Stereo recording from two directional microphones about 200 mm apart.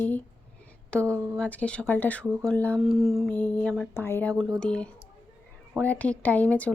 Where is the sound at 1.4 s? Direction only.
5° left (ahead or behind).